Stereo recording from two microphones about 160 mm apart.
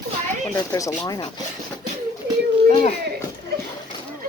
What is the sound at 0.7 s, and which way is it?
Speech, 20° left (ahead or behind).